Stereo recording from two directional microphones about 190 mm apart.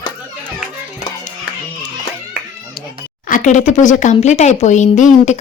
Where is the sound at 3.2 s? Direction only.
45° left (ahead or behind).